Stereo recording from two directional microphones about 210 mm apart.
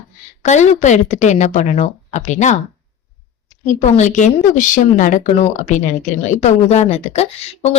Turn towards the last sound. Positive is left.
turn(degrees=30)  # may be behind; listen again after turning